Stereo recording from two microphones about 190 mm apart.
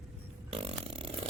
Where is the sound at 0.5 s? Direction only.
30° right (ahead or behind).